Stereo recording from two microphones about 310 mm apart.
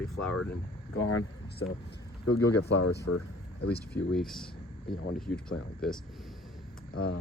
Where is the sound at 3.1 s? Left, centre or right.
Left.